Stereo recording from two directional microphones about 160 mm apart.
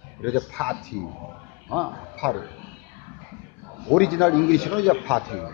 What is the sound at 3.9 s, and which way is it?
A man's voice, 5° left (ahead or behind).